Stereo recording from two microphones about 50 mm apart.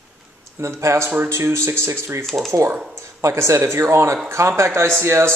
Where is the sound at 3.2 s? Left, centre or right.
Right.